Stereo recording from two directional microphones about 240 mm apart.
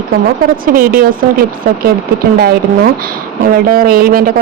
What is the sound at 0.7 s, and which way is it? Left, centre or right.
Speech, right.